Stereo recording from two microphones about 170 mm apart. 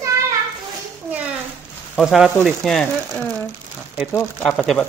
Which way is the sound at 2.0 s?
Centre (ahead or behind).